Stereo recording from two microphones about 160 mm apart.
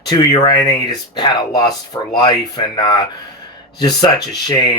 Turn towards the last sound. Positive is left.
turn(degrees=25)  # may be behind; listen again after turning